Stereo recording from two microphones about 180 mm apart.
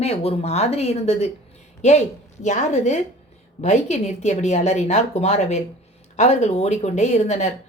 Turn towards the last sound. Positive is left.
turn(degrees=40)  # may be behind; listen again after turning